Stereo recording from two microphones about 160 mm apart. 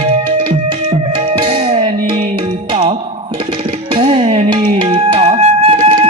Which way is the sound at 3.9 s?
35° right (ahead or behind).